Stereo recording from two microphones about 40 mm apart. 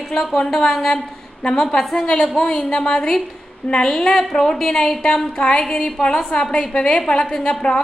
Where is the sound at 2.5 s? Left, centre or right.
Left.